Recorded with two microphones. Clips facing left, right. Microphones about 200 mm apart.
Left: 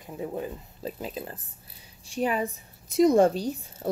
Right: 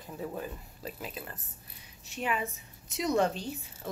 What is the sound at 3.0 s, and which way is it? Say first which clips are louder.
Speech: left 9 dB; 50° left (ahead or behind).